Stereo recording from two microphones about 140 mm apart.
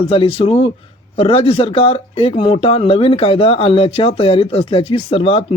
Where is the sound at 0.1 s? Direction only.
40° left (ahead or behind).